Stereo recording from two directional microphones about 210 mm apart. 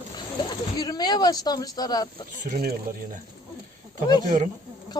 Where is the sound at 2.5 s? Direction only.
45° right (ahead or behind).